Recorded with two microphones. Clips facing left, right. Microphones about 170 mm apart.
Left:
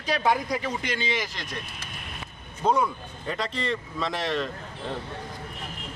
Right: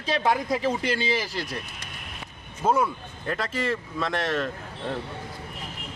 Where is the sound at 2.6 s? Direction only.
5° right (ahead or behind).